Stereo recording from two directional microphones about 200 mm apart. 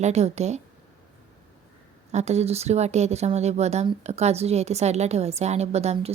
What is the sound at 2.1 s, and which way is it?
Speech, 35° right (ahead or behind).